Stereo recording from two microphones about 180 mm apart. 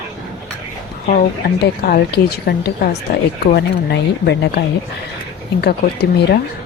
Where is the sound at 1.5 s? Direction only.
60° left (ahead or behind).